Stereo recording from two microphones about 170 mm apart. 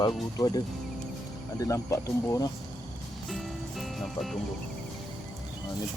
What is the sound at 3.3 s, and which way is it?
Music, centre (ahead or behind).